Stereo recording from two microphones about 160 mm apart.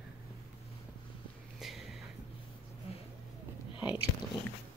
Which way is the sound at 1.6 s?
Centre (ahead or behind).